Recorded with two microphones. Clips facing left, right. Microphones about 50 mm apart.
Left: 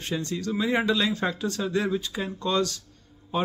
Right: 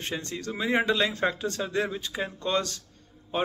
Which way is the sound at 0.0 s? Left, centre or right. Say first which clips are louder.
Left 4 dB; right.